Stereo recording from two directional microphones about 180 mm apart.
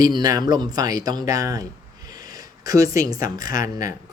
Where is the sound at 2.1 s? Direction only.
20° right (ahead or behind).